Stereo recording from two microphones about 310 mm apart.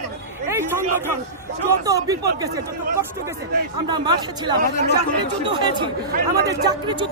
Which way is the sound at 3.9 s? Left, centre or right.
Centre.